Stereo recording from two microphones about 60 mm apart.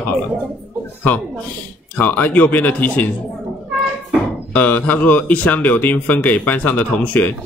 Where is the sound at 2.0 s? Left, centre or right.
Left.